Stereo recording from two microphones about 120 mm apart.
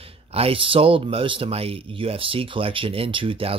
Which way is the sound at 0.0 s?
55° right (ahead or behind).